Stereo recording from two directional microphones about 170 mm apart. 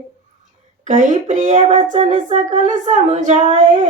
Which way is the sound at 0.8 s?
50° right (ahead or behind).